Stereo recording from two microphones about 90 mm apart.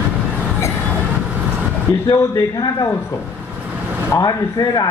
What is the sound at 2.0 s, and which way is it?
Speech, 45° left (ahead or behind).